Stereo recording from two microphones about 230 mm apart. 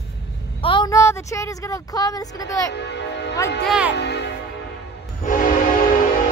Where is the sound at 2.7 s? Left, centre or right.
Left.